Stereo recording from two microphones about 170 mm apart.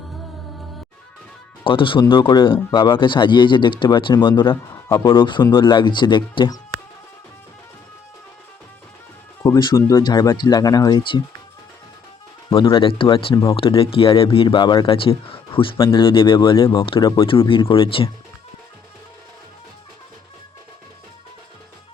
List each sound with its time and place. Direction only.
1.6 s speech: 30° left (ahead or behind)
4.7 s speech: 20° left (ahead or behind)
9.4 s speech: 20° left (ahead or behind)
12.5 s speech: 30° left (ahead or behind)
13.3 s speech: 20° left (ahead or behind)
13.6 s speech: 30° left (ahead or behind)